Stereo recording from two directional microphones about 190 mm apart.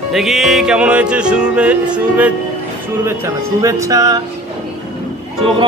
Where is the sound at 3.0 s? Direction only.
15° right (ahead or behind).